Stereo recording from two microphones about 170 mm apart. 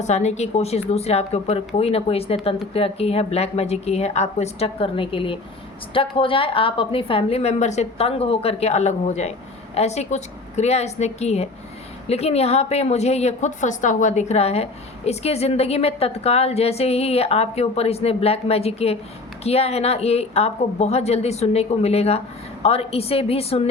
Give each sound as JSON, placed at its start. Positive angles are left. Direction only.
{"t": 0.0, "sound": "a woman's voice", "side_deg": 40}